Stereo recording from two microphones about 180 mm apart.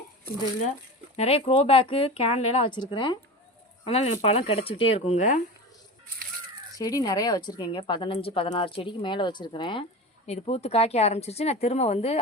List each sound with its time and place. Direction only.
1.1 s speech: 35° left (ahead or behind)
3.8 s speech: 35° left (ahead or behind)
6.7 s a woman's voice: 20° left (ahead or behind)
10.2 s speech: 35° left (ahead or behind)